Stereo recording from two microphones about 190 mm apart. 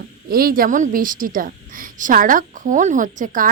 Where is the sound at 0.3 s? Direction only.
50° right (ahead or behind).